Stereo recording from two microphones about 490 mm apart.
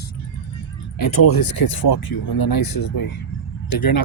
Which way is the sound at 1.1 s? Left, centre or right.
Left.